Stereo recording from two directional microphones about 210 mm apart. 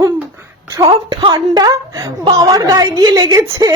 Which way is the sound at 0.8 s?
20° right (ahead or behind).